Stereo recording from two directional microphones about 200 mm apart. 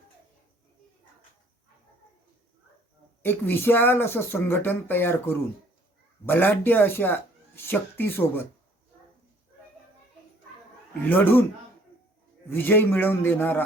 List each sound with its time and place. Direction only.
3.2 s speech: 10° left (ahead or behind)
11.1 s speech: 10° left (ahead or behind)
12.5 s speech: 10° left (ahead or behind)